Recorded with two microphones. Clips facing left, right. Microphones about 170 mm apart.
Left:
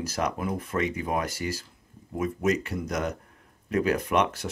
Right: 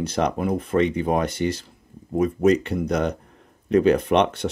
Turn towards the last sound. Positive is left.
turn(degrees=-30)  # may be behind; listen again after turning